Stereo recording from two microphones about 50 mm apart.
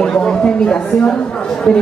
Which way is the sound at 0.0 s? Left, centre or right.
Centre.